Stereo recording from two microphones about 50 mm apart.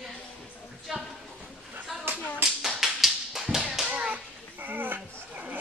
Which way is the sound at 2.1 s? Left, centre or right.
Right.